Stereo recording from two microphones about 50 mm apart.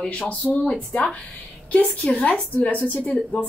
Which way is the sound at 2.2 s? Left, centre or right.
Left.